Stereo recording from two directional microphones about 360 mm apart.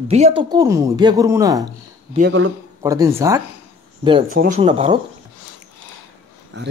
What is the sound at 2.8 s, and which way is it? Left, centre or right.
A woman's voice, centre.